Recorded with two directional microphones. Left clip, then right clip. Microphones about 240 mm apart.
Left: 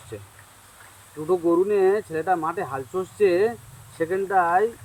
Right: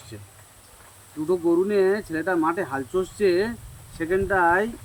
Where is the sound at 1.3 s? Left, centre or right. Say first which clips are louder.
Left 1 dB; right.